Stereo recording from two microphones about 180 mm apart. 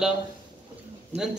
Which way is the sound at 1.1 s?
35° right (ahead or behind).